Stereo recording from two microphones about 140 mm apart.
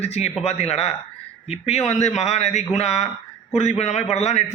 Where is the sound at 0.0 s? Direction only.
50° left (ahead or behind).